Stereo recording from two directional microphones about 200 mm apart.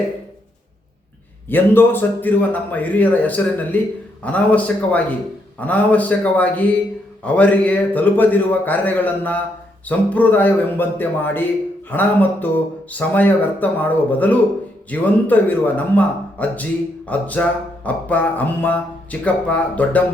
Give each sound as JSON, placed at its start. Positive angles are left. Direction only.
{"t": 1.5, "sound": "a man's voice", "side_deg": 10}